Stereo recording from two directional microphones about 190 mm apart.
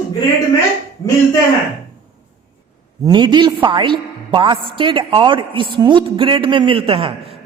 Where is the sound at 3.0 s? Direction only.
25° right (ahead or behind).